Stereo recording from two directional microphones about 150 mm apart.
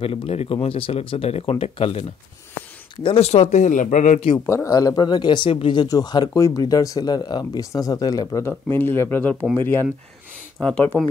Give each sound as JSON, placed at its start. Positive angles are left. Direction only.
{"t": 0.0, "sound": "speech", "side_deg": 40}
{"t": 4.6, "sound": "speech", "side_deg": 25}